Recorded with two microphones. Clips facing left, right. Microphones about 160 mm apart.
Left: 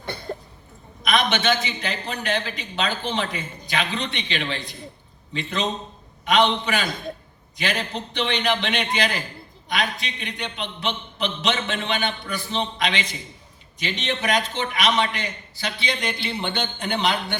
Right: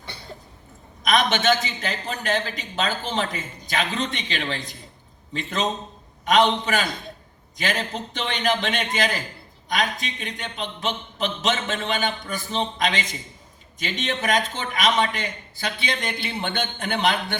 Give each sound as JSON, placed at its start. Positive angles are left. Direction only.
{"t": 0.0, "sound": "cough", "side_deg": 55}
{"t": 1.0, "sound": "a man's voice", "side_deg": -45}